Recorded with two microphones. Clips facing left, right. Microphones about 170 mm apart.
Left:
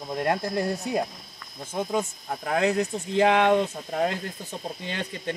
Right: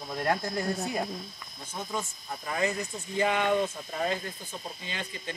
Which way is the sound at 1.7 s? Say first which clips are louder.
Left 8 dB; 60° left (ahead or behind).